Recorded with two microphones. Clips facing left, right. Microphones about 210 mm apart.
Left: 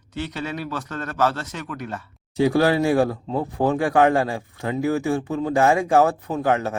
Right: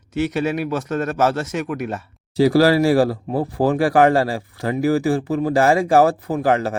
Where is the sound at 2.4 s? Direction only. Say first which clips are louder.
Right 4 dB; 35° right (ahead or behind).